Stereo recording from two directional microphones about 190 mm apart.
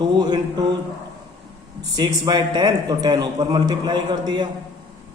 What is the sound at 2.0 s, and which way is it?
A man's voice, 20° right (ahead or behind).